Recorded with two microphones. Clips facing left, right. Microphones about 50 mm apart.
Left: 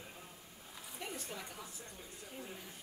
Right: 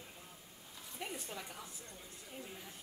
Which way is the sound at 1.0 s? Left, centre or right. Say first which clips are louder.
Right 1 dB; centre.